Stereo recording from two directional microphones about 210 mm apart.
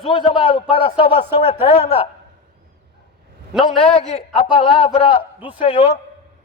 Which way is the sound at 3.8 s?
25° left (ahead or behind).